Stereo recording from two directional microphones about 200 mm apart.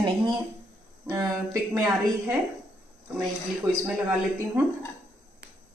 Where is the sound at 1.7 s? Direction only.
15° right (ahead or behind).